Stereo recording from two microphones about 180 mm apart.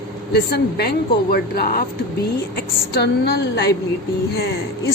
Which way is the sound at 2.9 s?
65° left (ahead or behind).